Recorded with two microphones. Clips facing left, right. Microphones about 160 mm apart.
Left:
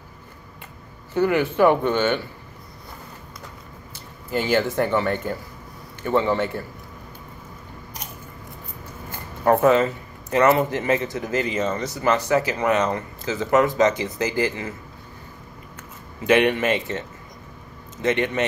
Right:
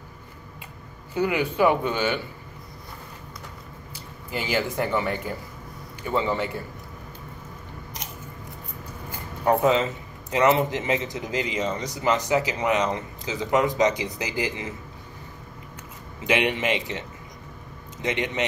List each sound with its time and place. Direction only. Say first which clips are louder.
1.1 s speech: left 5 dB; 50° left (ahead or behind)
4.3 s a man's voice: left 5 dB; 10° right (ahead or behind)
6.0 s a man's voice: left 4 dB; 45° left (ahead or behind)
9.4 s speech: left 4 dB; 50° left (ahead or behind)
10.3 s a man's voice: left 3 dB; 15° right (ahead or behind)
16.3 s a man's voice: left 5 dB; 15° right (ahead or behind)
18.0 s a man's voice: left 5 dB; 15° right (ahead or behind)